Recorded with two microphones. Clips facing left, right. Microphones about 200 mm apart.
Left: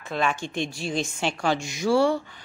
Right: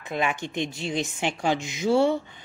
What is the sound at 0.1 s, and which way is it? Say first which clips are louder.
A woman's voice: left 1 dB; 15° right (ahead or behind).